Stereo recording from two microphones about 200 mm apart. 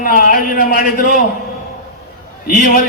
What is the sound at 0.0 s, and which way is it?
Speech, 45° left (ahead or behind).